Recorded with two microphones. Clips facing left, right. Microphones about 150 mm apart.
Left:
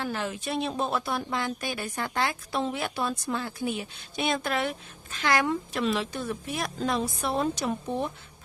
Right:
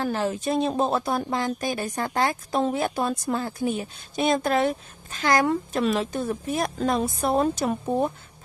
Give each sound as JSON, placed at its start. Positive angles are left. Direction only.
{"t": 0.0, "sound": "speech", "side_deg": -40}